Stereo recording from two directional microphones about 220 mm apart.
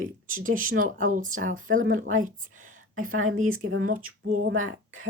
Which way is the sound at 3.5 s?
70° right (ahead or behind).